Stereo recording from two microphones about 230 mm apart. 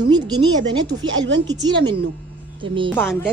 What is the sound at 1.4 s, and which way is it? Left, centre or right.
A woman's voice, centre.